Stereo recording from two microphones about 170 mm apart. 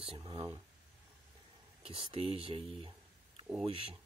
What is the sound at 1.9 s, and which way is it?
Speech, 30° right (ahead or behind).